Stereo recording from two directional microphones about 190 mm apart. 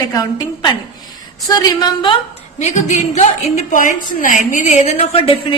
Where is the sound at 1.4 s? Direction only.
20° left (ahead or behind).